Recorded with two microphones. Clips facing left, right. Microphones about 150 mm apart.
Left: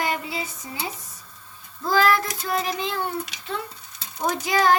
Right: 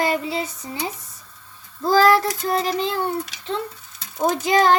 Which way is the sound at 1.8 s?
35° right (ahead or behind).